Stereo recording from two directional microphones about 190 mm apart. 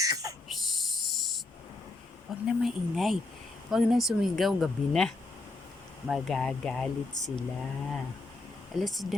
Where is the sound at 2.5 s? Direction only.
Centre (ahead or behind).